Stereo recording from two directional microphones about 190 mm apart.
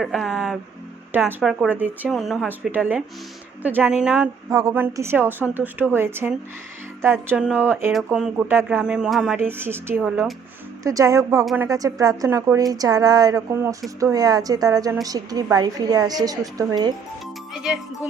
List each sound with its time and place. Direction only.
0.0 s speech: centre (ahead or behind)
4.4 s a woman's voice: 20° right (ahead or behind)
17.6 s speech: centre (ahead or behind)